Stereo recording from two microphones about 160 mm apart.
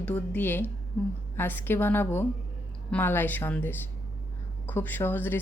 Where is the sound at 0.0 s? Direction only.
10° left (ahead or behind).